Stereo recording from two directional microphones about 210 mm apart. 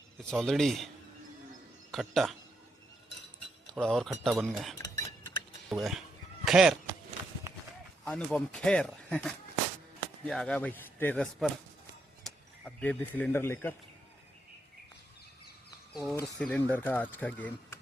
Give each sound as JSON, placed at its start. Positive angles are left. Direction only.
{"t": 0.2, "sound": "speech", "side_deg": 0}
{"t": 1.9, "sound": "speech", "side_deg": 0}
{"t": 3.7, "sound": "speech", "side_deg": 5}
{"t": 4.8, "sound": "cutlery", "side_deg": 15}
{"t": 5.6, "sound": "speech", "side_deg": 0}
{"t": 6.4, "sound": "a sound", "side_deg": -5}
{"t": 8.0, "sound": "speech", "side_deg": 5}
{"t": 15.9, "sound": "a sound", "side_deg": 0}
{"t": 16.1, "sound": "speech", "side_deg": 5}